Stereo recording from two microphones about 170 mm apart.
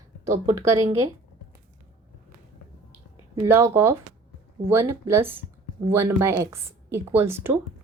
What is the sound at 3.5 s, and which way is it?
Speech, 15° right (ahead or behind).